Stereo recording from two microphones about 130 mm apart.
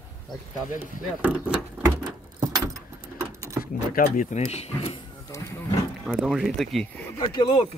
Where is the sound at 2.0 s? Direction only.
30° right (ahead or behind).